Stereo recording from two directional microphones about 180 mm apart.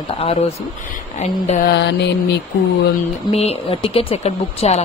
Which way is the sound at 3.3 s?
35° left (ahead or behind).